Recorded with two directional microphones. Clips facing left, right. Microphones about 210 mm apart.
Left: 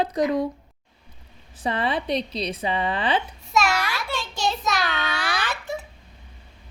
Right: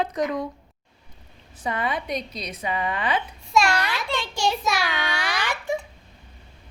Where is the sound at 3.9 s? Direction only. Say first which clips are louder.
Right 2 dB; 10° right (ahead or behind).